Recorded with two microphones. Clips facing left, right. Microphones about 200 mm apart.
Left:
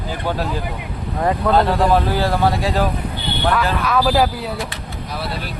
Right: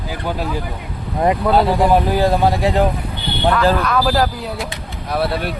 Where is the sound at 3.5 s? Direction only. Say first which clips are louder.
Right 3 dB; centre (ahead or behind).